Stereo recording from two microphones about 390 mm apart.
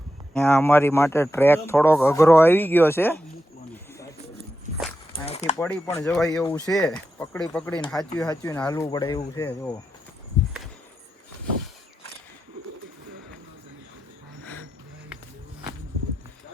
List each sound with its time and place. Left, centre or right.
0.3 s speech: centre
5.1 s a sound: centre
5.5 s speech: centre